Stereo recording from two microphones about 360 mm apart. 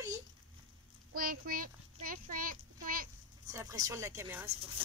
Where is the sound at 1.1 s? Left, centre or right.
Right.